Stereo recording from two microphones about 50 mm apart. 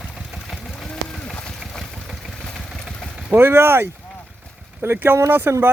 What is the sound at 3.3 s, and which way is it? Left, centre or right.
Speech, right.